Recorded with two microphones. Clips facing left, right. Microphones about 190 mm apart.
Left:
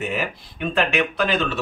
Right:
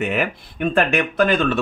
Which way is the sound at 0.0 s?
60° right (ahead or behind).